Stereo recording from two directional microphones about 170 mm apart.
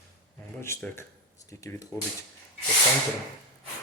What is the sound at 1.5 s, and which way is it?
Speech, 15° left (ahead or behind).